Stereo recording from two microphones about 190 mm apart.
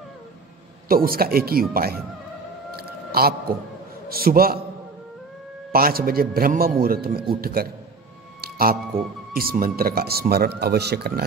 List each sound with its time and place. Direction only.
0.8 s speech: 50° right (ahead or behind)
2.7 s a sound: 55° right (ahead or behind)
4.1 s speech: 50° right (ahead or behind)
5.7 s a man's voice: 50° right (ahead or behind)